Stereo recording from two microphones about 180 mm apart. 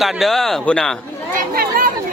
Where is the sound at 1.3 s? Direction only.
55° right (ahead or behind).